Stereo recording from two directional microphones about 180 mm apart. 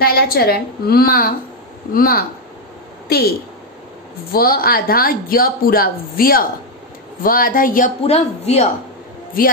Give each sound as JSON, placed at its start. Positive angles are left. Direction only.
{"t": 0.0, "sound": "a woman's voice", "side_deg": 55}
{"t": 8.0, "sound": "a man's voice", "side_deg": 35}
{"t": 9.4, "sound": "speech", "side_deg": 55}